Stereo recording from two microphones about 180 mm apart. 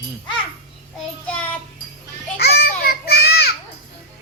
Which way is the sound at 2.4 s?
65° left (ahead or behind).